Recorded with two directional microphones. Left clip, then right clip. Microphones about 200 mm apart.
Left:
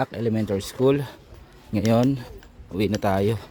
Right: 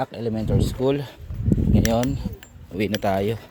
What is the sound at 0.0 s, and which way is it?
Speech, 30° left (ahead or behind).